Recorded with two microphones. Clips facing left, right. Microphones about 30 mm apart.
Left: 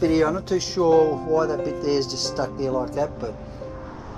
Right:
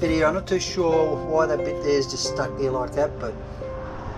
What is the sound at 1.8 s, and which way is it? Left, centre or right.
Speech, centre.